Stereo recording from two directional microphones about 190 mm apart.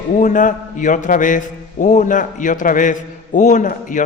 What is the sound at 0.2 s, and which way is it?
A man's voice, 45° left (ahead or behind).